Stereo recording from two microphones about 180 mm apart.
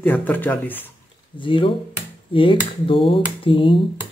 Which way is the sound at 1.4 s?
30° left (ahead or behind).